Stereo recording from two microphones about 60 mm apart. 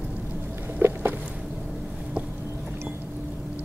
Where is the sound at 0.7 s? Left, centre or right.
Right.